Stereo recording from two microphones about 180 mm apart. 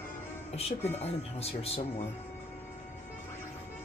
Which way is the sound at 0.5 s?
35° left (ahead or behind).